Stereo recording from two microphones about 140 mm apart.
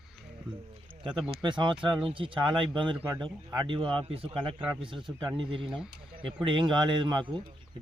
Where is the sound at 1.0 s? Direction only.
35° right (ahead or behind).